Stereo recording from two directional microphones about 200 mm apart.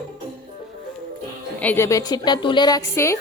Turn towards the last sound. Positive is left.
turn(degrees=15)  # may be behind; listen again after turning